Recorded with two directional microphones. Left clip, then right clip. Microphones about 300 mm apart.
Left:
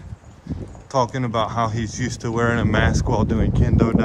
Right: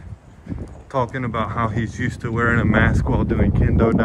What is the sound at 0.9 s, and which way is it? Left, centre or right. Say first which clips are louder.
Speech: left 2 dB; centre.